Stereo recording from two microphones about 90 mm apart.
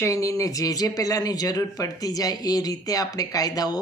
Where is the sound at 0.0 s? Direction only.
35° left (ahead or behind).